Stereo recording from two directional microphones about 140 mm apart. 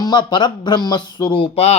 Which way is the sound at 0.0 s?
30° left (ahead or behind).